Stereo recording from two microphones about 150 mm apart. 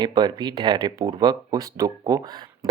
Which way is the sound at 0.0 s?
30° right (ahead or behind).